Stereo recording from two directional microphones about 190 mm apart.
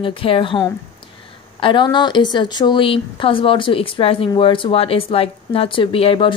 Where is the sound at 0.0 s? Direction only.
30° left (ahead or behind).